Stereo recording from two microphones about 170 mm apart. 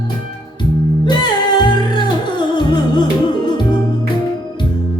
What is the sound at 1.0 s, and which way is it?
Music, 25° left (ahead or behind).